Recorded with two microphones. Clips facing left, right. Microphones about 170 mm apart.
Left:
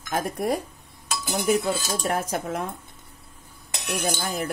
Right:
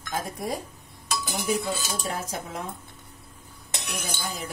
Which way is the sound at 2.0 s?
60° left (ahead or behind).